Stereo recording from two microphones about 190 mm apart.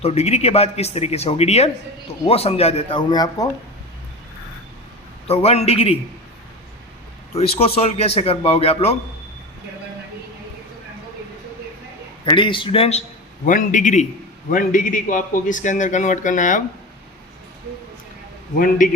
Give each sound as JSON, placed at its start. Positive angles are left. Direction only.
{"t": 0.0, "sound": "a man's voice", "side_deg": 35}
{"t": 5.3, "sound": "a man's voice", "side_deg": 35}
{"t": 7.8, "sound": "a man's voice", "side_deg": 35}
{"t": 12.2, "sound": "a man's voice", "side_deg": 25}
{"t": 13.4, "sound": "a man's voice", "side_deg": 45}
{"t": 18.5, "sound": "a man's voice", "side_deg": 50}